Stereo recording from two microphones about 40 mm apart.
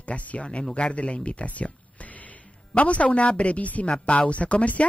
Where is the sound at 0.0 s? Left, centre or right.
Left.